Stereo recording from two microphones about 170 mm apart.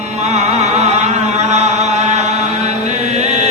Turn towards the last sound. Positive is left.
turn(degrees=-40)  # may be behind; listen again after turning